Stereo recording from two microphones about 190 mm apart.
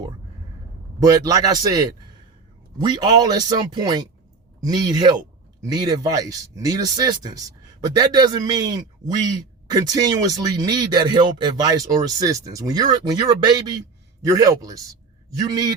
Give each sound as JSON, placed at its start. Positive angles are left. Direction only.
{"t": 1.0, "sound": "speech", "side_deg": -20}
{"t": 2.8, "sound": "speech", "side_deg": -20}